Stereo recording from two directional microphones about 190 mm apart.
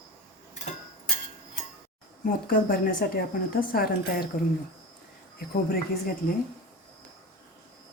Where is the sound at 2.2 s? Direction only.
50° left (ahead or behind).